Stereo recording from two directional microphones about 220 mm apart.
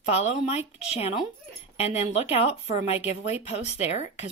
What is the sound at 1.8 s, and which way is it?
Speech, 25° left (ahead or behind).